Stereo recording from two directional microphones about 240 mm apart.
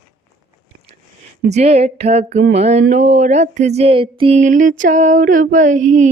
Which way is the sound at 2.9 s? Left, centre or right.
Right.